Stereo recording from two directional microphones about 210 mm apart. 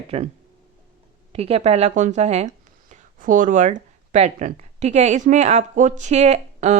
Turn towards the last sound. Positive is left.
turn(degrees=-30)  # may be behind; listen again after turning